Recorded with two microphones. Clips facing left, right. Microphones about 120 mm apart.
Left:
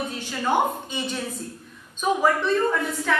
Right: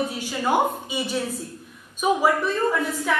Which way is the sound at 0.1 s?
10° right (ahead or behind).